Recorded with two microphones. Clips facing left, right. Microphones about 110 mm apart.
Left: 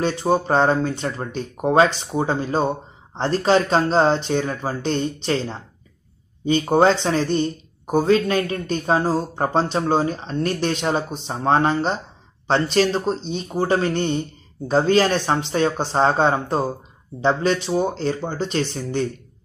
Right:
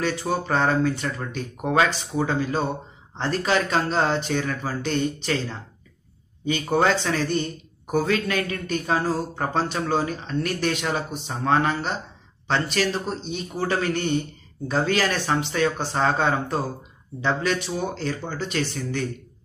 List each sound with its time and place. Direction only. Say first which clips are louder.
0.0 s speech: left 5 dB; 30° left (ahead or behind)
6.7 s speech: left 4 dB; 30° left (ahead or behind)